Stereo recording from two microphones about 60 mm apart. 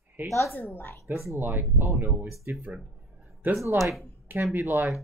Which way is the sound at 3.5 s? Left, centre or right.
Right.